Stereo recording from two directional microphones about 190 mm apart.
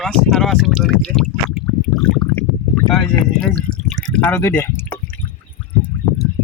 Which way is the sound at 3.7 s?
5° left (ahead or behind).